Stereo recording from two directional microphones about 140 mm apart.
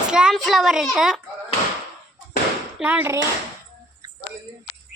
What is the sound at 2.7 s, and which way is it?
Speech, 10° right (ahead or behind).